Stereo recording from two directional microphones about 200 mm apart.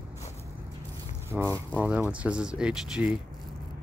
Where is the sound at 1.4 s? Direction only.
10° left (ahead or behind).